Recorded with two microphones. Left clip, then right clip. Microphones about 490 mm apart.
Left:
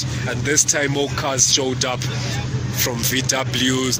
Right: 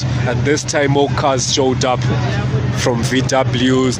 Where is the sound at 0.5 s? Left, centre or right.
Right.